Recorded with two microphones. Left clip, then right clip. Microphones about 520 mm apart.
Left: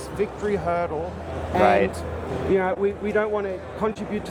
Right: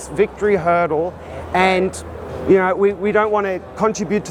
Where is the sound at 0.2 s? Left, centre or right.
Right.